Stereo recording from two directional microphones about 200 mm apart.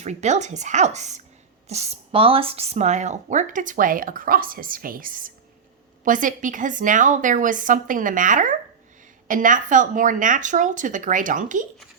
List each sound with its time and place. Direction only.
0.0 s speech: 35° right (ahead or behind)